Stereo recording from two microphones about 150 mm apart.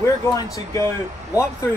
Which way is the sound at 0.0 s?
20° left (ahead or behind).